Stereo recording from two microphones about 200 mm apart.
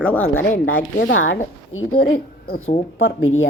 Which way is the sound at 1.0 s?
75° left (ahead or behind).